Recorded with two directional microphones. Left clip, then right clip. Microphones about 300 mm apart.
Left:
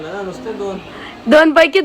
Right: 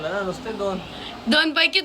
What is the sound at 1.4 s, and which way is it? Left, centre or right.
Speech, centre.